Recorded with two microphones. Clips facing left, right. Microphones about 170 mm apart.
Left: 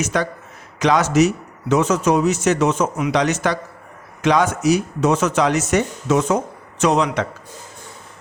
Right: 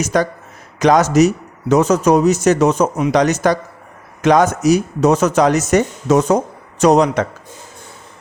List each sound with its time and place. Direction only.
0.0 s speech: 40° right (ahead or behind)